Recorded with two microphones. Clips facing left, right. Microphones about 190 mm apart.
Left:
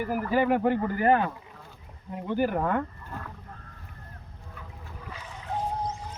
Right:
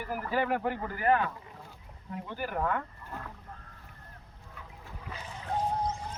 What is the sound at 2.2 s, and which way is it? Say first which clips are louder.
Speech: left 7 dB; 20° left (ahead or behind).